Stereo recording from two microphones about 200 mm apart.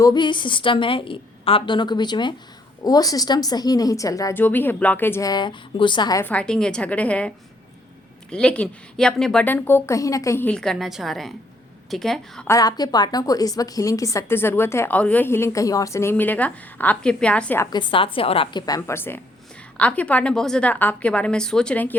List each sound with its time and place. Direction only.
0.0 s a woman's voice: 20° left (ahead or behind); by 12.5 s centre (ahead or behind)
12.5 s a woman's voice: 20° left (ahead or behind)
17.7 s a woman's voice: 25° left (ahead or behind); by 21.9 s 5° left (ahead or behind)